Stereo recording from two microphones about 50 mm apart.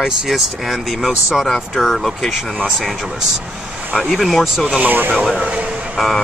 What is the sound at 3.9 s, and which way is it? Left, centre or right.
Speech, centre.